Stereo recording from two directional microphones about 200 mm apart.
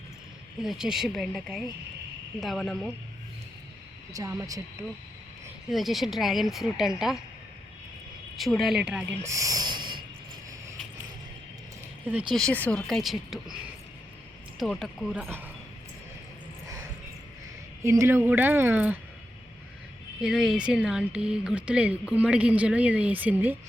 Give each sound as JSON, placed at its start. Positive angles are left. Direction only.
{"t": 0.6, "sound": "speech", "side_deg": 0}
{"t": 4.1, "sound": "speech", "side_deg": -15}
{"t": 5.6, "sound": "speech", "side_deg": 0}
{"t": 8.4, "sound": "speech", "side_deg": 0}
{"t": 12.3, "sound": "speech", "side_deg": 5}
{"t": 14.6, "sound": "speech", "side_deg": 0}
{"t": 16.6, "sound": "a sound", "side_deg": -15}
{"t": 17.8, "sound": "speech", "side_deg": -15}
{"t": 20.2, "sound": "speech", "side_deg": 0}